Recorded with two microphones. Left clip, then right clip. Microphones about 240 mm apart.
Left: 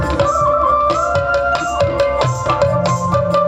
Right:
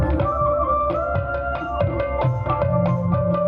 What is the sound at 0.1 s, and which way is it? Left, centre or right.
Music, left.